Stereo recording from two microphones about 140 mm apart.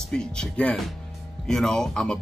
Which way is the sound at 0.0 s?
5° left (ahead or behind).